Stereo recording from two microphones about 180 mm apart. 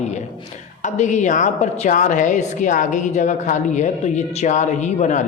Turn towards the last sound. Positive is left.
turn(degrees=40)  # may be behind; listen again after turning